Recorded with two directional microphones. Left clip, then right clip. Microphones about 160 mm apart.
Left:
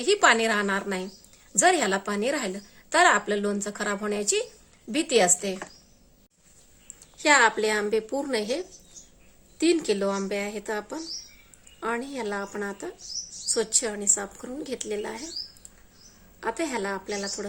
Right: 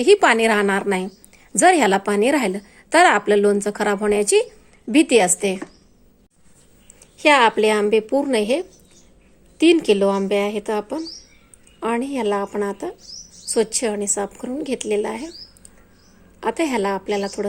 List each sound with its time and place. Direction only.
0.0 s a woman's voice: 40° right (ahead or behind)
7.2 s a woman's voice: 25° right (ahead or behind)
16.4 s a woman's voice: 30° right (ahead or behind)